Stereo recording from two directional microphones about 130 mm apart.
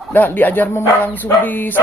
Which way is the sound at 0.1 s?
15° left (ahead or behind).